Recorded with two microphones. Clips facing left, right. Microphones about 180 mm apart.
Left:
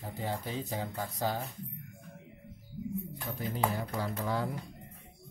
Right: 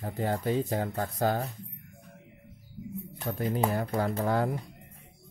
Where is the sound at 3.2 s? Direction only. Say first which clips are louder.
Right 5 dB; 55° right (ahead or behind).